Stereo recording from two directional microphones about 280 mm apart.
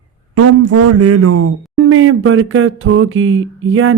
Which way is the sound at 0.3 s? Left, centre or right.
Right.